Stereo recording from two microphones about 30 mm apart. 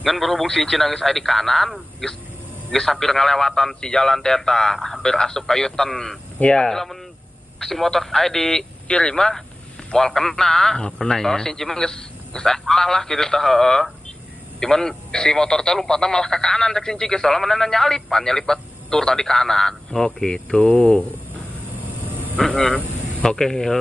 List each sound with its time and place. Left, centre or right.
0.0 s a man's voice: centre
2.7 s speech: centre; by 6.8 s left
7.6 s speech: centre
8.8 s speech: left
9.1 s a man's voice: centre
20.4 s speech: left
23.2 s speech: centre